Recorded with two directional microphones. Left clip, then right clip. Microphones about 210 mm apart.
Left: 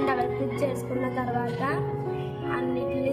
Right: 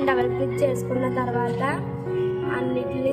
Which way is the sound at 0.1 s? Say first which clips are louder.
Right 4 dB; 35° right (ahead or behind).